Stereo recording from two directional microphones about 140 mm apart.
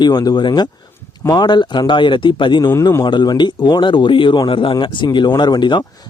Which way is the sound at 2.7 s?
25° left (ahead or behind).